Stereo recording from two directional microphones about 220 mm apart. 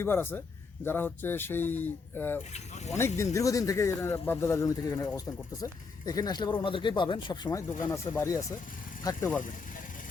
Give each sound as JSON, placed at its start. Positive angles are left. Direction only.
{"t": 0.0, "sound": "speech", "side_deg": 10}
{"t": 2.5, "sound": "speech", "side_deg": 30}
{"t": 3.3, "sound": "speech", "side_deg": 15}
{"t": 6.1, "sound": "speech", "side_deg": 20}